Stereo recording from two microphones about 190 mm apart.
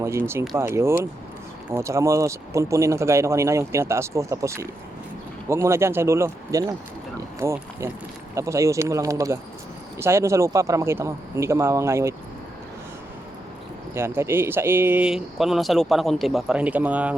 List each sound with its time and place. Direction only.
0.0 s speech: 15° right (ahead or behind)
13.9 s speech: 15° right (ahead or behind)